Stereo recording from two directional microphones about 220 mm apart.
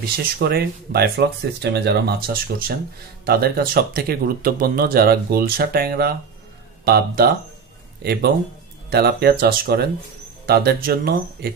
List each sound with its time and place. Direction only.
0.0 s speech: 45° right (ahead or behind)